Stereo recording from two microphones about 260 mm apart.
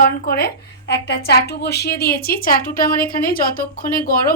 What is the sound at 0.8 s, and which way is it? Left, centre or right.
Speech, left.